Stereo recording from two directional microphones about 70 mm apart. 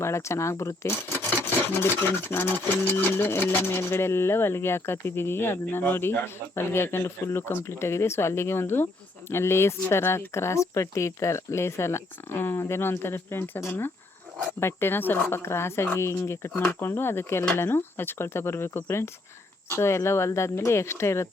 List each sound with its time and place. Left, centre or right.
0.0 s speech: left
1.6 s speech: left